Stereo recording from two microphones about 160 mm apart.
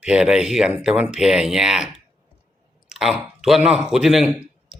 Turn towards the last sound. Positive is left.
turn(degrees=-10)  # may be behind; listen again after turning